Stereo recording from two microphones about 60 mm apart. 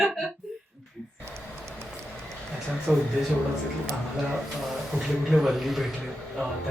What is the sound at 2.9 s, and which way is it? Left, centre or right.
Speech, right.